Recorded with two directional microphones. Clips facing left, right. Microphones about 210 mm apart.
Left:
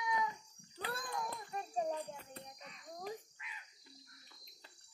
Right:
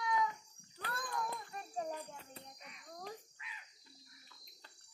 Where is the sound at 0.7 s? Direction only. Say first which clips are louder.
Even; 25° left (ahead or behind).